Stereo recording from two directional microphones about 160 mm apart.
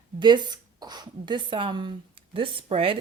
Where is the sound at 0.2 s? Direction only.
30° right (ahead or behind).